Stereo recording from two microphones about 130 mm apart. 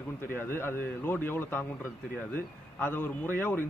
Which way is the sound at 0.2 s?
15° left (ahead or behind).